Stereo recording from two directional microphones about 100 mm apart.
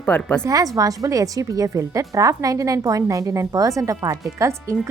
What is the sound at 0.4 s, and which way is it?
Speech, 35° right (ahead or behind).